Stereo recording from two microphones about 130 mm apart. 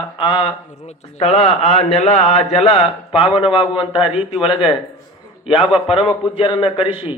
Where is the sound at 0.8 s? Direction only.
55° left (ahead or behind).